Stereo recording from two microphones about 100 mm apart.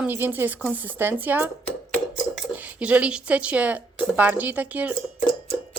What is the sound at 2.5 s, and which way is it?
Speech, 15° right (ahead or behind).